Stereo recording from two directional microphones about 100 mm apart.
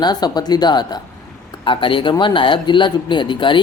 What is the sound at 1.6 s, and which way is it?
Speech, 55° left (ahead or behind).